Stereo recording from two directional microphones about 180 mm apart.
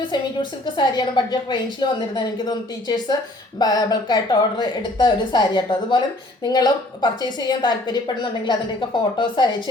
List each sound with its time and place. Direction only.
0.6 s a woman's voice: 25° left (ahead or behind)